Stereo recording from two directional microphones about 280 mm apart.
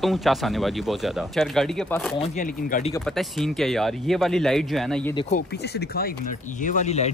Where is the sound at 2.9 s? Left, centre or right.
Centre.